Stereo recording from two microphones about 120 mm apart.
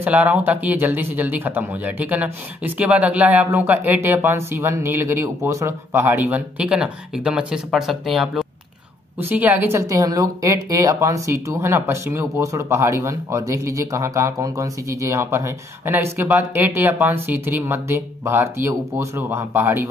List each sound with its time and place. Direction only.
0.0 s speech: 15° right (ahead or behind)
9.3 s speech: 15° right (ahead or behind)